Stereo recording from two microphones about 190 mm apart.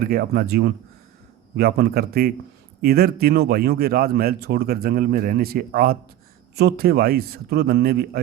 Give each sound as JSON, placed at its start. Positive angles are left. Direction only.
{"t": 0.0, "sound": "a man's voice", "side_deg": -50}